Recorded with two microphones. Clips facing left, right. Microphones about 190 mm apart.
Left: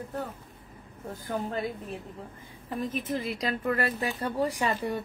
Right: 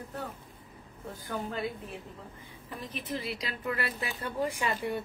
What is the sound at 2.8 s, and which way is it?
Speech, 45° left (ahead or behind).